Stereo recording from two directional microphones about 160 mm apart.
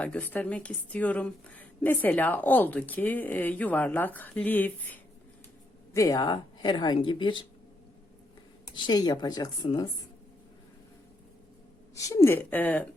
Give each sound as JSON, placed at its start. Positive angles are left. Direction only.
{"t": 0.0, "sound": "a woman's voice", "side_deg": 10}
{"t": 5.9, "sound": "speech", "side_deg": 20}
{"t": 8.7, "sound": "speech", "side_deg": 25}
{"t": 11.9, "sound": "a woman's voice", "side_deg": 20}